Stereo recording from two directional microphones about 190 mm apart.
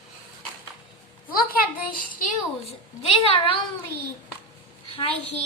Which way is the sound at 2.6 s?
30° left (ahead or behind).